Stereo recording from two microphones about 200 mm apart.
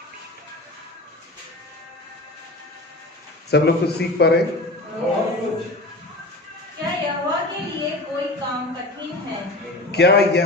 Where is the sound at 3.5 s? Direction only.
55° left (ahead or behind).